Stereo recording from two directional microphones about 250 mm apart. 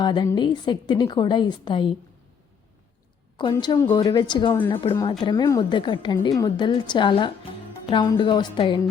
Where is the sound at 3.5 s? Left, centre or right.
Centre.